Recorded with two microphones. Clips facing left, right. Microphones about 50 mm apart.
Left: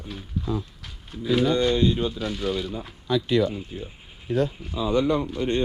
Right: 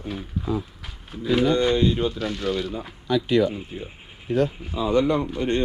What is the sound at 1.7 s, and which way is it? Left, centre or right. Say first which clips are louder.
Speech: right 1 dB; centre.